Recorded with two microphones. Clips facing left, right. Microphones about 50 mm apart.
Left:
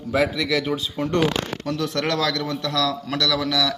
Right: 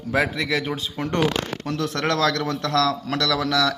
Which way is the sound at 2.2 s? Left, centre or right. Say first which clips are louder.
Right 2 dB; right.